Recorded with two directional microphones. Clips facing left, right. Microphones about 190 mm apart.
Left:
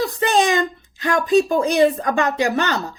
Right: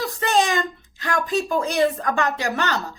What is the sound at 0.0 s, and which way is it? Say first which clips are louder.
A woman's voice: left 3 dB; 20° left (ahead or behind).